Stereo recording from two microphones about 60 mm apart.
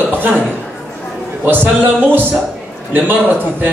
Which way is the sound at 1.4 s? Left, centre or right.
Right.